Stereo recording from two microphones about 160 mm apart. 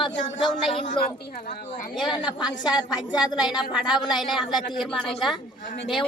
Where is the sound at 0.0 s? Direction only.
30° left (ahead or behind).